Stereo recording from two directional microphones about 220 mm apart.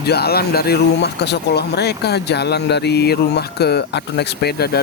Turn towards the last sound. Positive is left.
turn(degrees=45)  # may be behind; listen again after turning